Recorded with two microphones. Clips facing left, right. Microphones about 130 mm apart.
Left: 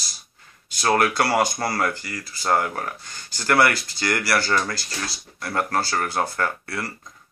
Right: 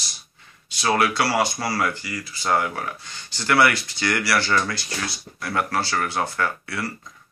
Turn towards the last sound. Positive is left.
turn(degrees=45)  # may be behind; listen again after turning